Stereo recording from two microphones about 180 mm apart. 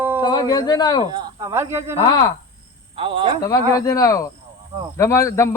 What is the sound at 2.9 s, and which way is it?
Speech, 30° right (ahead or behind).